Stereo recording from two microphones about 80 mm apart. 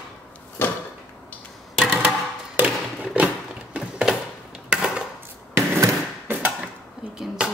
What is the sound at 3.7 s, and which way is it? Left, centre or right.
Mechanisms, centre.